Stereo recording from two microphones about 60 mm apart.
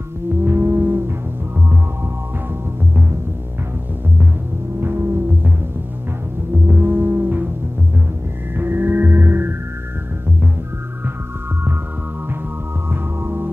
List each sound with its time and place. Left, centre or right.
0.5 s moo: right
4.7 s throbbing: right
6.7 s music: right
8.5 s music: right
13.2 s music: right